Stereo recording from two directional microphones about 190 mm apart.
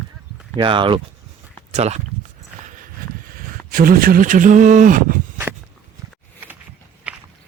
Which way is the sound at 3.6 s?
50° right (ahead or behind).